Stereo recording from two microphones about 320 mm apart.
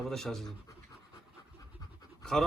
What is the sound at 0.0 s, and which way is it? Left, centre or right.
Speech, centre.